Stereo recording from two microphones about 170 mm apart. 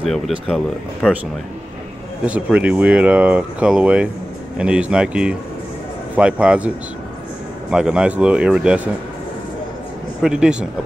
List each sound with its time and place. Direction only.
0.0 s speech: centre (ahead or behind)
2.2 s speech: 5° right (ahead or behind)
7.7 s speech: 5° right (ahead or behind)
10.2 s speech: 5° right (ahead or behind)